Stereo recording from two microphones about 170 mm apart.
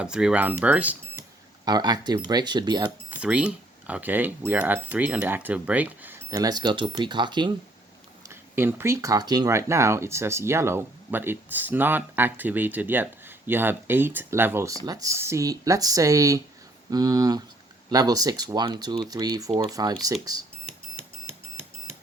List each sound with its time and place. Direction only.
0.0 s speech: 5° right (ahead or behind)
1.6 s speech: 25° right (ahead or behind)
3.1 s speech: 5° right (ahead or behind)
6.3 s speech: 25° right (ahead or behind)
8.3 s speech: 15° right (ahead or behind)